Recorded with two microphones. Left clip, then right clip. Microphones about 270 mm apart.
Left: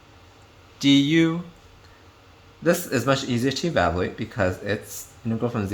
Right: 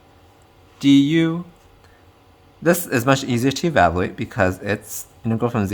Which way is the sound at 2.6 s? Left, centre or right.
Right.